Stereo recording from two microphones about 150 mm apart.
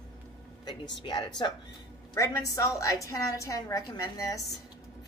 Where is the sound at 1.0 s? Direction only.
30° left (ahead or behind).